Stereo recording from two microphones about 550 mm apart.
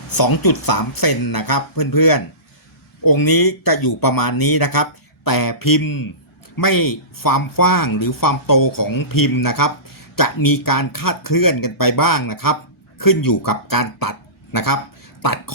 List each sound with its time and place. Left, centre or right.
0.1 s speech: left